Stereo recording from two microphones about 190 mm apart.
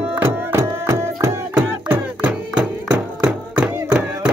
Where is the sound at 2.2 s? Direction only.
5° right (ahead or behind).